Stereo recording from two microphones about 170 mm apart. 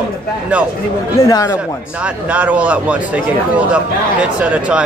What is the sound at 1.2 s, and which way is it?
Speech, 20° left (ahead or behind).